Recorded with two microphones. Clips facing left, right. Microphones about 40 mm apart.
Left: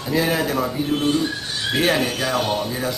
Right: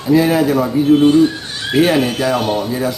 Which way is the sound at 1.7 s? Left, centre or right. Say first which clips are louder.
Right 7 dB; centre.